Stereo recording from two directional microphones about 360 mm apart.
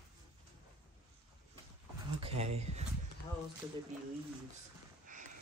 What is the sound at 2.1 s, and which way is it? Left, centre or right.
Speech, centre.